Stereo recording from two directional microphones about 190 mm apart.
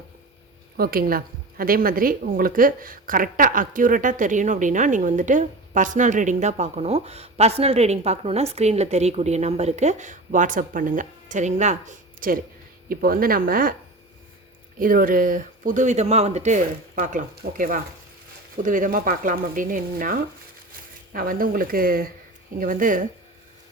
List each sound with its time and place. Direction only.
0.8 s a woman's voice: 50° right (ahead or behind)
14.8 s speech: 45° right (ahead or behind)